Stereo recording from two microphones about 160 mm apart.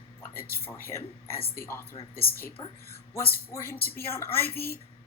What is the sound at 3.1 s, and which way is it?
A woman's voice, 15° left (ahead or behind).